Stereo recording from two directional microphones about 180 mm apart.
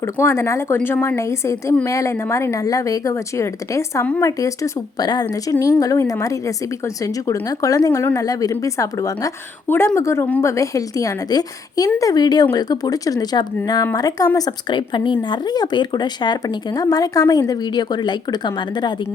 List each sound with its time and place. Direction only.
0.0 s a woman's voice: 15° left (ahead or behind)